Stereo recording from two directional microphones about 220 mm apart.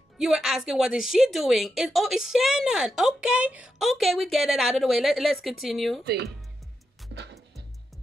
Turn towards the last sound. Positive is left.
turn(degrees=-50)  # may be behind; listen again after turning